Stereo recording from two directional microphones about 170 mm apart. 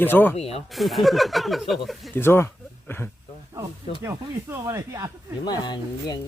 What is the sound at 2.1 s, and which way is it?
Speech, 15° left (ahead or behind).